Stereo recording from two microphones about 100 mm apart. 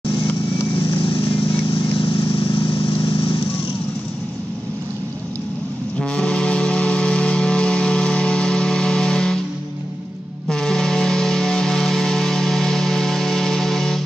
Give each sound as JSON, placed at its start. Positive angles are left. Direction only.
{"t": 1.0, "sound": "vehicle", "side_deg": 60}
{"t": 5.9, "sound": "music", "side_deg": 10}
{"t": 10.5, "sound": "music", "side_deg": 5}